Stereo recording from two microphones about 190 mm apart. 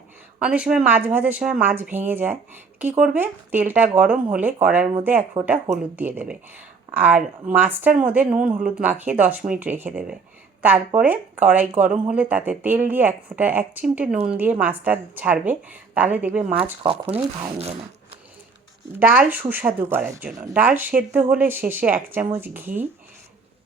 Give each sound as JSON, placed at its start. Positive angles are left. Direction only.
{"t": 0.3, "sound": "speech", "side_deg": -5}
{"t": 5.4, "sound": "speech", "side_deg": -35}
{"t": 5.7, "sound": "speech", "side_deg": -10}
{"t": 16.8, "sound": "speech", "side_deg": -30}
{"t": 18.9, "sound": "speech", "side_deg": -10}